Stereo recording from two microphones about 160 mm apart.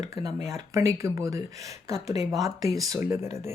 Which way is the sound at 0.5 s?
20° right (ahead or behind).